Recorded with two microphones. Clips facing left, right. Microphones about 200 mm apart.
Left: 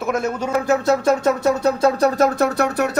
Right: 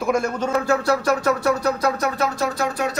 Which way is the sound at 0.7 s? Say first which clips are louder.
Left 5 dB; 25° left (ahead or behind).